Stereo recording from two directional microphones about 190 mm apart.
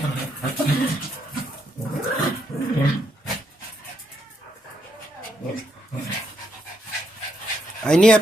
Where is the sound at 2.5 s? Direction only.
15° left (ahead or behind).